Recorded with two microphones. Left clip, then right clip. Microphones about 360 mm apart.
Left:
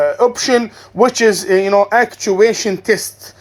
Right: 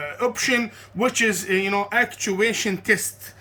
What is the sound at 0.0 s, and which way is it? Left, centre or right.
Speech, centre.